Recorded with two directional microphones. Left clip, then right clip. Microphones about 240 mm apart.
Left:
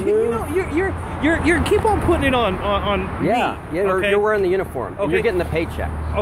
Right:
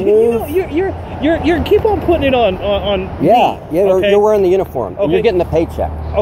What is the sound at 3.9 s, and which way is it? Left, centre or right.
Speech, centre.